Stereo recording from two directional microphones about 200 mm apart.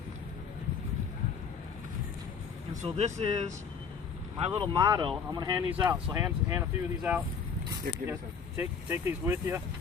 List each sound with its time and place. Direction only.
2.8 s speech: 30° right (ahead or behind); by 9.6 s 10° right (ahead or behind)